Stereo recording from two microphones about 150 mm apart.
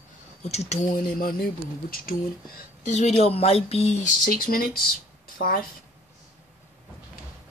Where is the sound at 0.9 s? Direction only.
70° left (ahead or behind).